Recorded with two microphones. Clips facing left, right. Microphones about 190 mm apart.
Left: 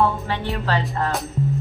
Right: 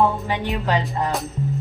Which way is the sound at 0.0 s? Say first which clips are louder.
Right 1 dB; 15° right (ahead or behind).